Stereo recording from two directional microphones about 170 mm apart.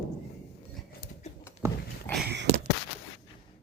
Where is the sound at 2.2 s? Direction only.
90° right.